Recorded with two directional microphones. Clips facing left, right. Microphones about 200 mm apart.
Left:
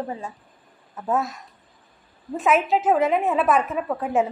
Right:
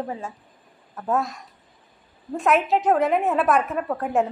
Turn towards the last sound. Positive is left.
turn(degrees=0)  # may be behind; listen again after turning